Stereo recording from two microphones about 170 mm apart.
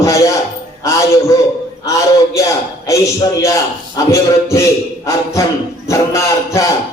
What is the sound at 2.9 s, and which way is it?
A man's voice, 20° left (ahead or behind).